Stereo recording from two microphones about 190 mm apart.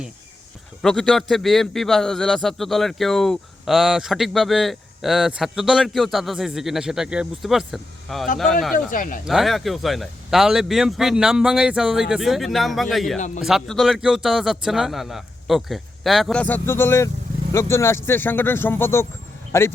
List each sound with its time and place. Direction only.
0.8 s a man's voice: centre (ahead or behind)
8.9 s speech: 45° left (ahead or behind)
9.2 s a man's voice: centre (ahead or behind)
13.1 s a man's voice: 40° left (ahead or behind)
13.4 s a man's voice: centre (ahead or behind)